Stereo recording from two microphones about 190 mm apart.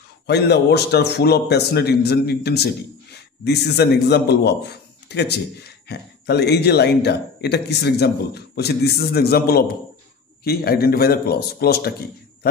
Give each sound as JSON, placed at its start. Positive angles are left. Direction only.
{"t": 0.3, "sound": "a man's voice", "side_deg": 60}